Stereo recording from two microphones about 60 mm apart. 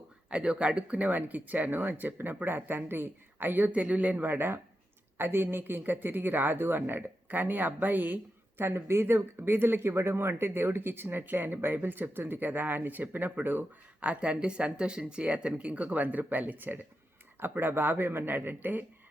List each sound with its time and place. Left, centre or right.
0.3 s speech: centre
14.1 s speech: centre